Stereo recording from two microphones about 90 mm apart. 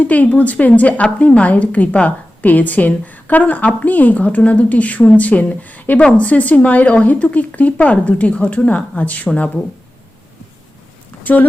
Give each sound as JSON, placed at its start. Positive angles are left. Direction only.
{"t": 0.0, "sound": "a woman's voice", "side_deg": 15}
{"t": 11.2, "sound": "speech", "side_deg": 20}